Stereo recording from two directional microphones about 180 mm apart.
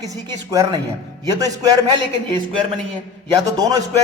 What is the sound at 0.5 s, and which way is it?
A man's voice, 20° right (ahead or behind).